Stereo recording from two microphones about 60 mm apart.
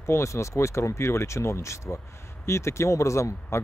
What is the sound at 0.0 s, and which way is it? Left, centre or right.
Speech, left.